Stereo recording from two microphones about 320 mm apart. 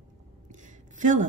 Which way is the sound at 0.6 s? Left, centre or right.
Right.